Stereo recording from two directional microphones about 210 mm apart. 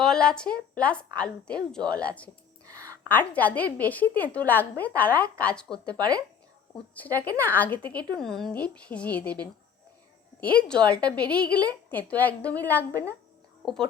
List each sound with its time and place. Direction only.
0.0 s a woman's voice: 5° left (ahead or behind)
2.6 s a sound: 15° right (ahead or behind)
3.1 s a woman's voice: 10° left (ahead or behind)
5.9 s speech: 20° right (ahead or behind)
6.7 s a woman's voice: 10° left (ahead or behind)
10.4 s a woman's voice: 5° left (ahead or behind)
12.9 s a woman's voice: 15° right (ahead or behind)
13.6 s a woman's voice: centre (ahead or behind)